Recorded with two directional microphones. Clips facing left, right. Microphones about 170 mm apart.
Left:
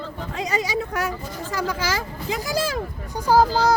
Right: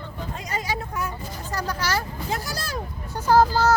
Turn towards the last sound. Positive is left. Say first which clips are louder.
# even
turn(degrees=10)  # may be behind; listen again after turning